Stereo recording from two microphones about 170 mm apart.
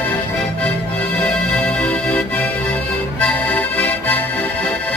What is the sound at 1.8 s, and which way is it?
Music, 5° left (ahead or behind).